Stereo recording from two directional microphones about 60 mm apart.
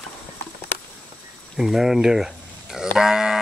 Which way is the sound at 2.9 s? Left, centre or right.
Centre.